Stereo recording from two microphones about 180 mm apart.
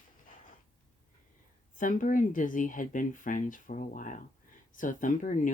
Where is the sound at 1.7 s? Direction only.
45° left (ahead or behind).